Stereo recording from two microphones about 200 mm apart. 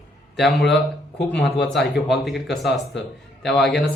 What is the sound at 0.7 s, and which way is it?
Speech, 60° left (ahead or behind).